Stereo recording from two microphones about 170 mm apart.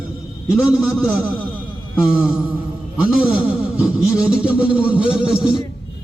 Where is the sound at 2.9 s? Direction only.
10° right (ahead or behind).